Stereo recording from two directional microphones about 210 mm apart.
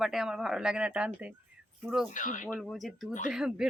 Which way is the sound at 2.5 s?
Centre (ahead or behind).